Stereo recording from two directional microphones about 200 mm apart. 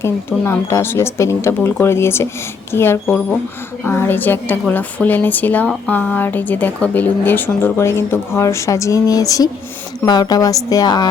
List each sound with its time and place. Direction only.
0.0 s a woman's voice: 15° left (ahead or behind)